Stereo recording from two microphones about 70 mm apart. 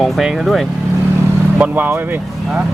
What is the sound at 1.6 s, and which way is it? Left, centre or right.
Speech, right.